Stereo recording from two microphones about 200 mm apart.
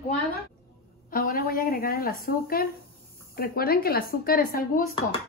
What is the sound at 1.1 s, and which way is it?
Speech, 45° left (ahead or behind).